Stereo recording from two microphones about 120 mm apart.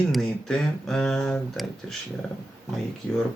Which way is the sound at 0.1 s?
5° left (ahead or behind).